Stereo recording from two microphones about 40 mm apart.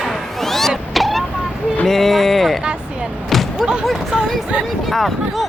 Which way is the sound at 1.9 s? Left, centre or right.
Centre.